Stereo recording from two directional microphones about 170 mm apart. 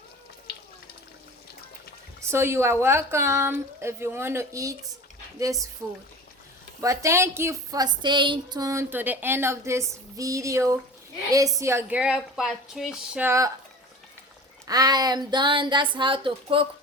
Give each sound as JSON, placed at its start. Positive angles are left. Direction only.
{"t": 2.3, "sound": "speech", "side_deg": -15}
{"t": 6.8, "sound": "speech", "side_deg": -20}
{"t": 14.7, "sound": "speech", "side_deg": -25}